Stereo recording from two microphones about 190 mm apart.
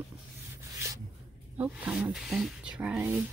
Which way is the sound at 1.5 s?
10° right (ahead or behind).